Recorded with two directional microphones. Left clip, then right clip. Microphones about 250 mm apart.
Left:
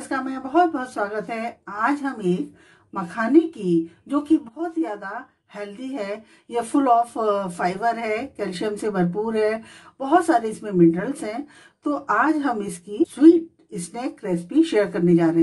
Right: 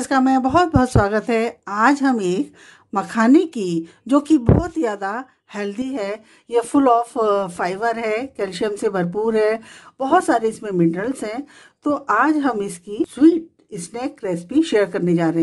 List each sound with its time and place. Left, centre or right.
0.1 s a woman's voice: right
4.8 s a woman's voice: right